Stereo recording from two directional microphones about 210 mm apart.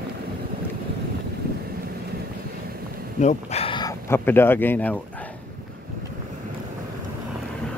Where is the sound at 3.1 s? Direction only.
30° left (ahead or behind).